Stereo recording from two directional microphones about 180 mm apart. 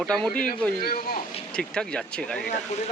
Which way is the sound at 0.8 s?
55° left (ahead or behind).